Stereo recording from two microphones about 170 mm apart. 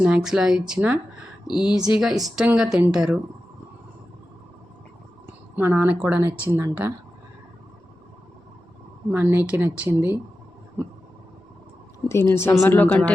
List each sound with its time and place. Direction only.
0.0 s a woman's voice: 5° right (ahead or behind)
5.5 s a woman's voice: 10° right (ahead or behind)
9.1 s a woman's voice: 10° right (ahead or behind)
12.0 s speech: 15° left (ahead or behind)